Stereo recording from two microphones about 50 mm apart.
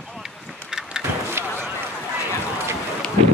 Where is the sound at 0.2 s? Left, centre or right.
Centre.